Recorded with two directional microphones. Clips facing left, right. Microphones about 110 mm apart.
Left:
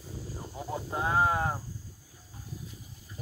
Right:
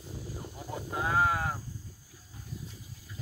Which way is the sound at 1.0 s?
25° left (ahead or behind).